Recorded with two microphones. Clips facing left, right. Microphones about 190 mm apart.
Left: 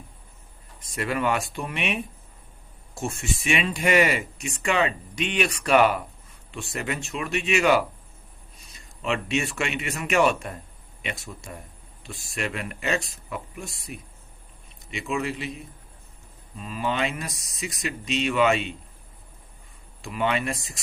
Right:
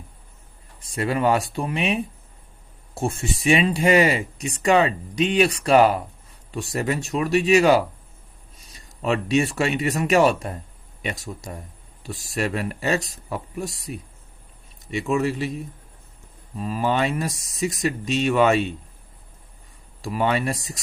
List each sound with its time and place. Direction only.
0.9 s speech: 30° right (ahead or behind)
3.0 s speech: 30° right (ahead or behind)
14.8 s speech: 40° right (ahead or behind)
20.0 s speech: 40° right (ahead or behind)